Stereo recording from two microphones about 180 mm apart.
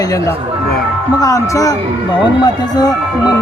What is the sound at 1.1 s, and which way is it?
Speech, 20° left (ahead or behind).